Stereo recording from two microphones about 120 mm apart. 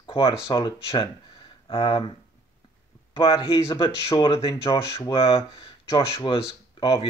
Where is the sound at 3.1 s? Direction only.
40° left (ahead or behind).